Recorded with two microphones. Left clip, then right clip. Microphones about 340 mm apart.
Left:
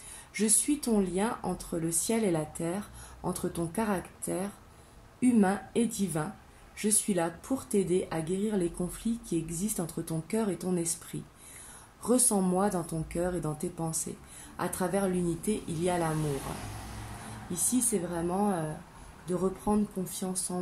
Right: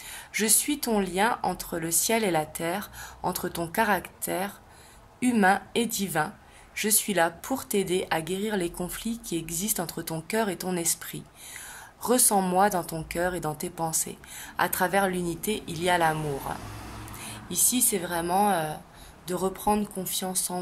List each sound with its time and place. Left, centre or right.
0.3 s speech: right
1.9 s speech: right
3.6 s speech: right
12.0 s speech: right
18.1 s speech: right